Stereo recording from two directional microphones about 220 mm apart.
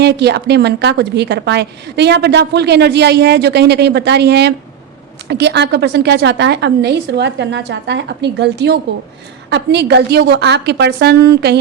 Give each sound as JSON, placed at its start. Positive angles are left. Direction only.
{"t": 0.0, "sound": "a woman's voice", "side_deg": -50}